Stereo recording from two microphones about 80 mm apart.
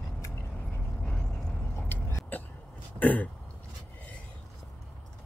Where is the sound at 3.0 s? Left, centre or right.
Left.